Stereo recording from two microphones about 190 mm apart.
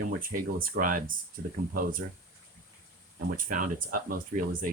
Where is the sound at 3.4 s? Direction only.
45° right (ahead or behind).